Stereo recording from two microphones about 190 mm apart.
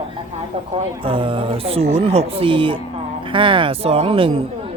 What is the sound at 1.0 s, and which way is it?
Speech, 25° right (ahead or behind).